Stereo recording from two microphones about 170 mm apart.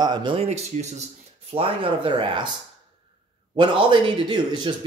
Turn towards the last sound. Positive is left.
turn(degrees=-25)  # may be behind; listen again after turning